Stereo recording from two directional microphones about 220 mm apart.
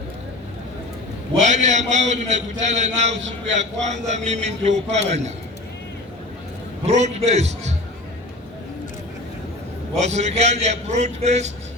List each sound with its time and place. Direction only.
1.4 s a man's voice: 30° right (ahead or behind)
6.8 s a man's voice: 30° right (ahead or behind)
9.9 s a man's voice: 30° right (ahead or behind)